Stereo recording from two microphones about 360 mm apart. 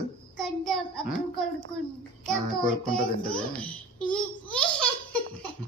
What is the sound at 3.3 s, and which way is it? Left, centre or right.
Baby laughter, centre.